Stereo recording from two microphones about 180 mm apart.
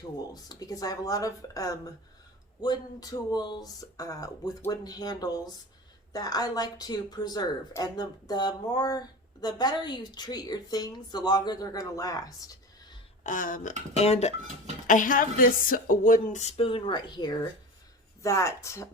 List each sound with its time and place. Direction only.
0.2 s speech: 20° left (ahead or behind)
13.2 s a woman's voice: 50° left (ahead or behind)
14.8 s a woman's voice: 45° left (ahead or behind); by 18.9 s 15° left (ahead or behind)